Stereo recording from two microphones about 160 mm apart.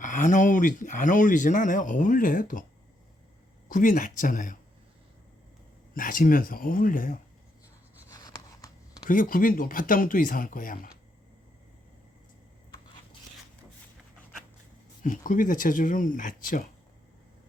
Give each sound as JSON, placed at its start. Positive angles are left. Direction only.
{"t": 0.0, "sound": "speech", "side_deg": 55}
{"t": 3.7, "sound": "speech", "side_deg": 55}
{"t": 5.9, "sound": "speech", "side_deg": 55}
{"t": 8.1, "sound": "a sound", "side_deg": 25}
{"t": 9.0, "sound": "speech", "side_deg": 60}
{"t": 15.0, "sound": "speech", "side_deg": 55}